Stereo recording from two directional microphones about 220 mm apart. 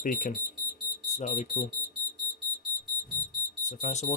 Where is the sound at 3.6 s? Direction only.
35° left (ahead or behind).